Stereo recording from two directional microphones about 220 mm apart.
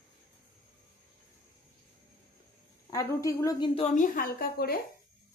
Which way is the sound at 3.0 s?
15° left (ahead or behind).